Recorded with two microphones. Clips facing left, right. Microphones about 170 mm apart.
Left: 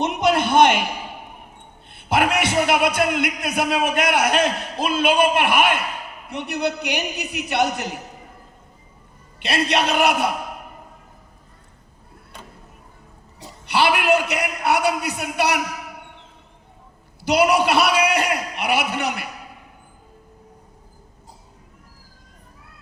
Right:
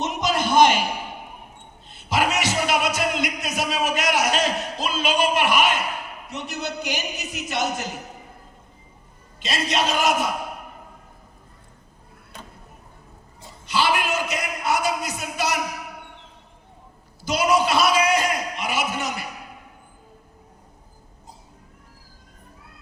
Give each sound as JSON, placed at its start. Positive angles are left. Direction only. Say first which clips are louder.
{"t": 0.0, "sound": "a sound", "louder": "left 4 dB", "side_deg": 60}
{"t": 1.9, "sound": "music", "louder": "left 3 dB", "side_deg": 60}
{"t": 6.3, "sound": "a man's voice", "louder": "left 6 dB", "side_deg": 60}
{"t": 9.4, "sound": "a man's voice", "louder": "left 3 dB", "side_deg": 65}
{"t": 13.4, "sound": "a sound", "louder": "left 3 dB", "side_deg": 65}
{"t": 17.2, "sound": "a man's voice", "louder": "left 3 dB", "side_deg": 65}